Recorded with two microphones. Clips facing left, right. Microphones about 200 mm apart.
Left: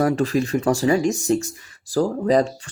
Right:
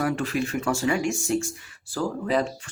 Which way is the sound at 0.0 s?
40° left (ahead or behind).